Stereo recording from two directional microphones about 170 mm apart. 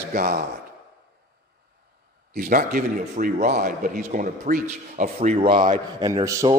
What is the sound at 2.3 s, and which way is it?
A man's voice, 55° right (ahead or behind).